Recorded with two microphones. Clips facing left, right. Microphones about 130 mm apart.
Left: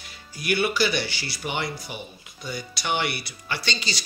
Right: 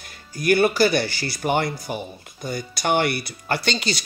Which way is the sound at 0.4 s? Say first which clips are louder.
Right 6 dB; 45° right (ahead or behind).